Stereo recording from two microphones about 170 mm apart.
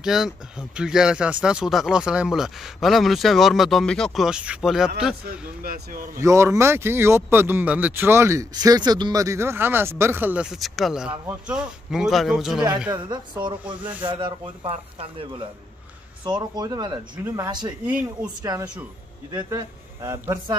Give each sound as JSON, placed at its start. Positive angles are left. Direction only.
{"t": 0.0, "sound": "speech", "side_deg": -5}
{"t": 5.6, "sound": "speech", "side_deg": -60}
{"t": 6.1, "sound": "speech", "side_deg": -15}
{"t": 12.9, "sound": "speech", "side_deg": -25}